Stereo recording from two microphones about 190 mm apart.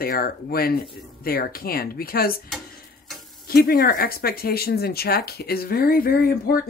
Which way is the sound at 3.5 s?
50° left (ahead or behind).